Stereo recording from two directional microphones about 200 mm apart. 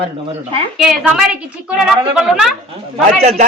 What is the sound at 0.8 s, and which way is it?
Speech, centre (ahead or behind).